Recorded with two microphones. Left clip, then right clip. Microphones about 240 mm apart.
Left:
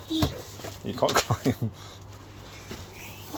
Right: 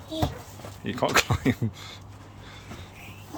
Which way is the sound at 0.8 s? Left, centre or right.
Centre.